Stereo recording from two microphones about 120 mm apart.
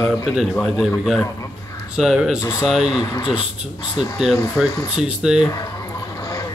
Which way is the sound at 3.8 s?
40° left (ahead or behind).